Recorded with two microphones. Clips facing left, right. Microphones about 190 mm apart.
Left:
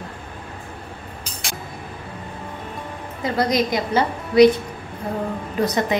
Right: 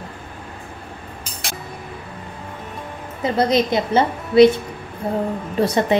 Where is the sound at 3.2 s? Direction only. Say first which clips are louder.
Right 3 dB; 25° right (ahead or behind).